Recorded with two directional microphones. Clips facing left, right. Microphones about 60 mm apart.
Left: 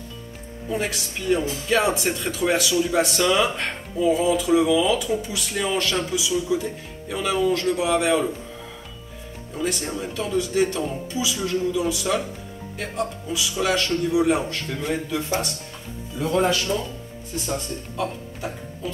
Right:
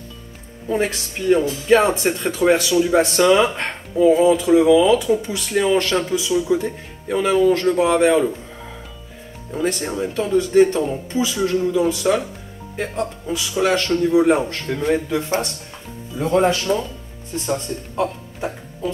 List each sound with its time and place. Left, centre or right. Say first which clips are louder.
0.7 s speech: right 5 dB; right
9.5 s speech: right 4 dB; right